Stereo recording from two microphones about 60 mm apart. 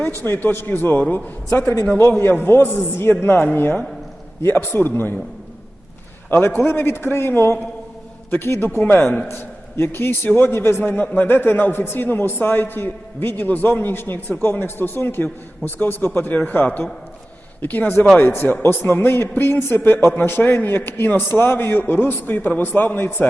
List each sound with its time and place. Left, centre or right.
0.0 s a man's voice: left
6.3 s a man's voice: left
10.8 s a man's voice: left
20.1 s a man's voice: left